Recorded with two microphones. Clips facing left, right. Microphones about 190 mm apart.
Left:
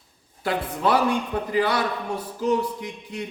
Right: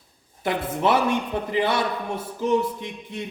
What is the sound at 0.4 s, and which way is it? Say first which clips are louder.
A man's voice: right 1 dB; 20° right (ahead or behind).